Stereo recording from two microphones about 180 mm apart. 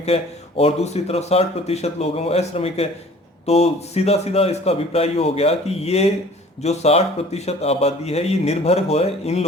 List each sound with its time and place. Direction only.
0.0 s speech: 35° left (ahead or behind)